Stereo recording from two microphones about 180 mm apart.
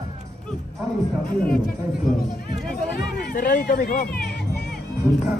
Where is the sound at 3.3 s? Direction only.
60° left (ahead or behind).